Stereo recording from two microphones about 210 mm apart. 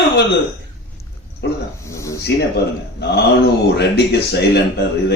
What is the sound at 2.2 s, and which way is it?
A man's voice, 50° left (ahead or behind).